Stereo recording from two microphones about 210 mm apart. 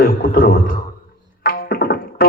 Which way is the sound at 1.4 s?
45° left (ahead or behind).